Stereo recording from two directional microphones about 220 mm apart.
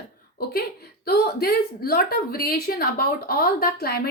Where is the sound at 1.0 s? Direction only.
45° left (ahead or behind).